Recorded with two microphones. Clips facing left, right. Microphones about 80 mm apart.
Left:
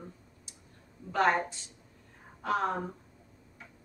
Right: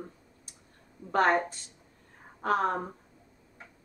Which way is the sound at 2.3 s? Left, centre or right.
Right.